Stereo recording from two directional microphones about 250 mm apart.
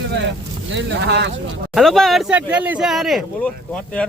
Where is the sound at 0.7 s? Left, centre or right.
Right.